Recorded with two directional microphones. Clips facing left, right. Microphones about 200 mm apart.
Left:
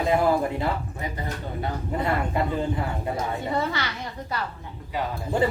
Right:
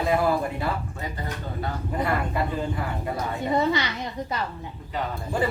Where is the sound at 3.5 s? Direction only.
20° right (ahead or behind).